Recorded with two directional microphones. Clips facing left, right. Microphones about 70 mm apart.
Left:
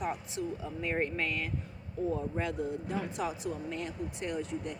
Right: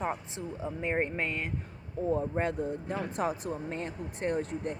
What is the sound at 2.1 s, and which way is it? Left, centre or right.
Speech, right.